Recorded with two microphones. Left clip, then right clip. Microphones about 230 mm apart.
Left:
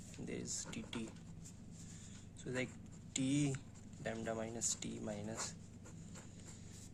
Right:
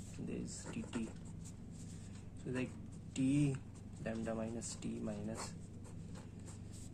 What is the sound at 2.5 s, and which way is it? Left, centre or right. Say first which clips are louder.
Speech: even; left.